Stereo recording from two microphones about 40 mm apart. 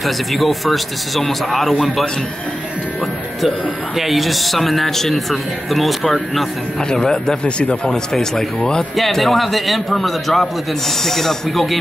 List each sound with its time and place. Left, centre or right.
0.0 s speech: centre
3.4 s speech: centre
7.0 s speech: centre
7.4 s speech: left
7.9 s speech: centre
8.9 s speech: centre